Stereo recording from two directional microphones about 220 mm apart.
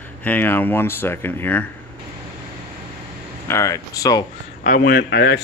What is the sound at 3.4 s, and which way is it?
Speech, 15° left (ahead or behind).